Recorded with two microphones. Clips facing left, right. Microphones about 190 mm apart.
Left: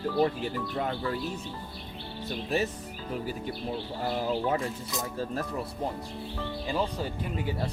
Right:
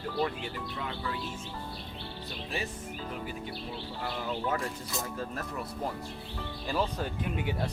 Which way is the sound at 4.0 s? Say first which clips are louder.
Left 6 dB; 40° left (ahead or behind).